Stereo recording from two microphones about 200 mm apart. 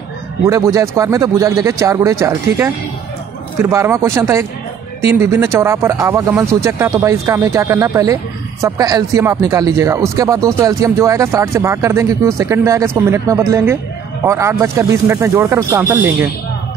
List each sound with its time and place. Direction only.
0.5 s speech: 15° right (ahead or behind)
3.7 s speech: 15° right (ahead or behind)